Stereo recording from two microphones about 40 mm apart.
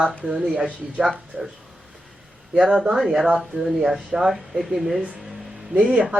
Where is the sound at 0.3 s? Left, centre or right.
Centre.